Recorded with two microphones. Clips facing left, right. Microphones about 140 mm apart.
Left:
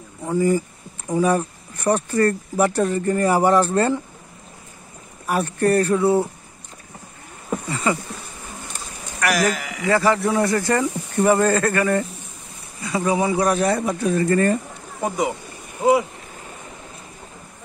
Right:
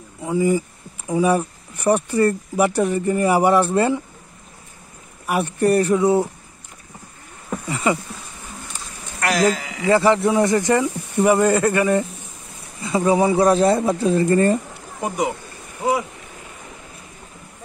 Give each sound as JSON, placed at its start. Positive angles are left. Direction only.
{"t": 0.2, "sound": "speech", "side_deg": -10}
{"t": 5.2, "sound": "speech", "side_deg": -15}
{"t": 7.6, "sound": "speech", "side_deg": -20}
{"t": 9.2, "sound": "speech", "side_deg": -25}
{"t": 15.0, "sound": "speech", "side_deg": -15}